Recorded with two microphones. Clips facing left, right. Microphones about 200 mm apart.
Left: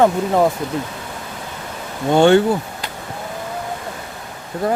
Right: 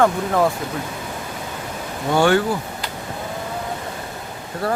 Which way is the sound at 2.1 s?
25° left (ahead or behind).